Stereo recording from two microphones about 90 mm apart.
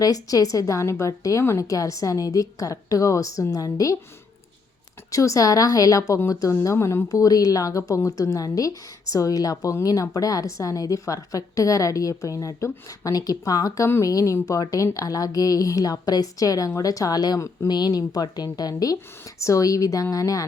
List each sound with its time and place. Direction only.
0.0 s a woman's voice: 40° left (ahead or behind)
5.1 s a woman's voice: 35° left (ahead or behind)
7.1 s a woman's voice: 40° left (ahead or behind)
17.7 s a woman's voice: 50° left (ahead or behind)